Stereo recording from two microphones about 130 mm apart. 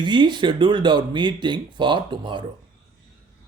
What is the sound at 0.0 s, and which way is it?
Speech, 35° right (ahead or behind).